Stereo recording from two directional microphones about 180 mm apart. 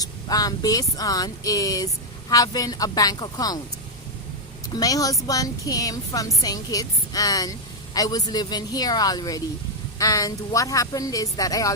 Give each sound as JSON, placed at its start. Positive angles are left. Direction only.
{"t": 0.0, "sound": "a woman's voice", "side_deg": 20}
{"t": 4.7, "sound": "a woman's voice", "side_deg": 20}